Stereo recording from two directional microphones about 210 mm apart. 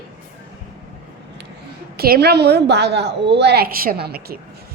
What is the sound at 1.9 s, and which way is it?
A woman's voice, 45° right (ahead or behind).